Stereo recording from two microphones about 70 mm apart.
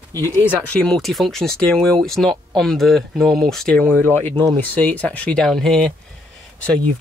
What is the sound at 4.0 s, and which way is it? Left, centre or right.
Speech, left.